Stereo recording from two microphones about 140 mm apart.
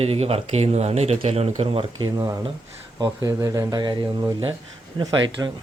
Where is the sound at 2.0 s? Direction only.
25° right (ahead or behind).